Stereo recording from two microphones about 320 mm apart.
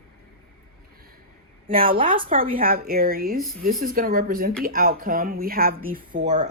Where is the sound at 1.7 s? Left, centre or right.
Right.